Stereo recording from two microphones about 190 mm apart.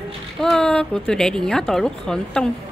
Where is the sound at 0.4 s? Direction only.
5° left (ahead or behind).